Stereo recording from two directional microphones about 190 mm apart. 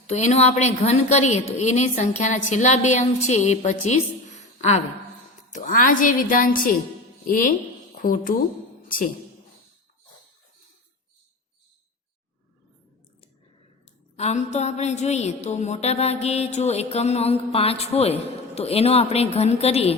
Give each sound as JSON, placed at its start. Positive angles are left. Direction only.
{"t": 0.1, "sound": "a woman's voice", "side_deg": 35}
{"t": 14.2, "sound": "a woman's voice", "side_deg": 35}